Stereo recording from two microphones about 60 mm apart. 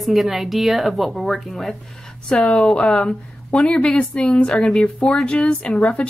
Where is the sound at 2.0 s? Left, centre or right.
Centre.